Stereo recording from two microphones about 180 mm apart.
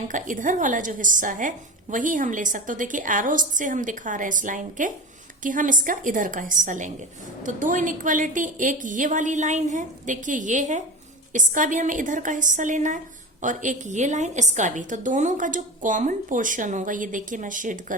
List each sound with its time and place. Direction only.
0.1 s a woman's voice: 45° right (ahead or behind)